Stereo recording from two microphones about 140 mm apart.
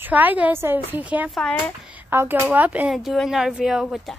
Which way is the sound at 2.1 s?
15° right (ahead or behind).